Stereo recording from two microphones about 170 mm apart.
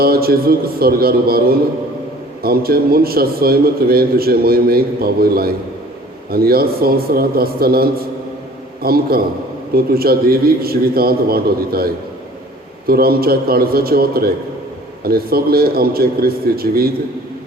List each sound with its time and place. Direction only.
0.0 s a man's voice: 65° right (ahead or behind)
12.9 s a man's voice: 65° right (ahead or behind)